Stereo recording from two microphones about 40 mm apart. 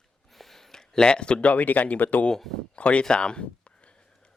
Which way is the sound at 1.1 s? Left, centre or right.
Left.